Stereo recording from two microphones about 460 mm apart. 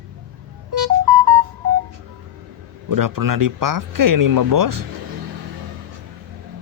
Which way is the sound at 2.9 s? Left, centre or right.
Right.